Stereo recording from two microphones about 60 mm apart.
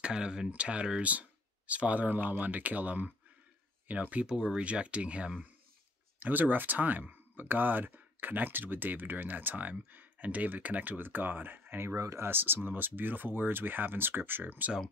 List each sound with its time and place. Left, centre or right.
0.0 s speech: centre
6.1 s speech: right
11.8 s speech: right
12.3 s speech: right